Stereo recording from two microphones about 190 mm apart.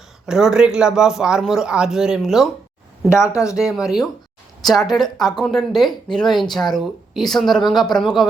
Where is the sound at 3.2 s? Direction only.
15° left (ahead or behind).